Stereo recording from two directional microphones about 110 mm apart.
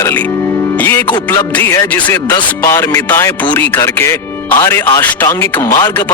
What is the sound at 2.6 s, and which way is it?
Music, 30° left (ahead or behind).